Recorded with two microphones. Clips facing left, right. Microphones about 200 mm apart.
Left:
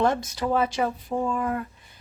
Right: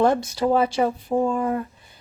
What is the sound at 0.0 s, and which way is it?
A woman's voice, 35° right (ahead or behind).